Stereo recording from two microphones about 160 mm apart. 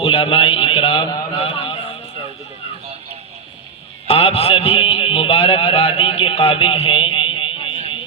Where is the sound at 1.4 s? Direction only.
35° left (ahead or behind).